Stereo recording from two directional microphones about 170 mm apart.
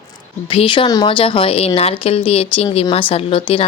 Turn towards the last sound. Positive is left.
turn(degrees=35)  # may be behind; listen again after turning